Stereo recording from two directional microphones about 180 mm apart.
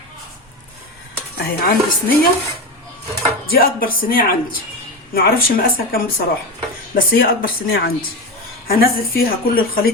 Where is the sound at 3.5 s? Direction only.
55° left (ahead or behind).